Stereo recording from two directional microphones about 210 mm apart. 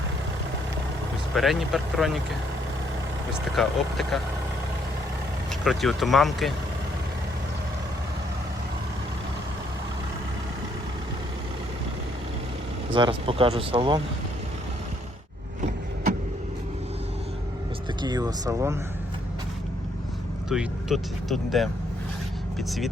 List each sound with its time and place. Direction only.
1.4 s speech: centre (ahead or behind)
3.3 s speech: centre (ahead or behind)
5.6 s speech: centre (ahead or behind)
12.9 s speech: 25° right (ahead or behind)
18.0 s speech: 20° right (ahead or behind)
20.5 s speech: centre (ahead or behind)